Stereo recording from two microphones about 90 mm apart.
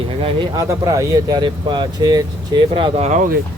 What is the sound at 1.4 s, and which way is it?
Speech, 60° right (ahead or behind).